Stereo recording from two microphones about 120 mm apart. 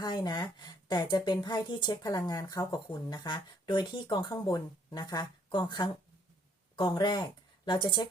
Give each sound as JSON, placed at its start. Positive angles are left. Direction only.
{"t": 0.0, "sound": "a woman's voice", "side_deg": 35}